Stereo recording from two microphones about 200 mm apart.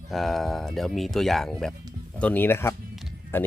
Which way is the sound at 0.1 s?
Centre (ahead or behind).